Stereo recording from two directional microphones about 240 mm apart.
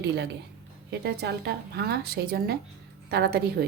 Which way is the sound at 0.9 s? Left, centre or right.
Right.